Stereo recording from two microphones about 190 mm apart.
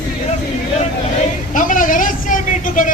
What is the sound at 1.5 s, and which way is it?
Speech, 45° left (ahead or behind).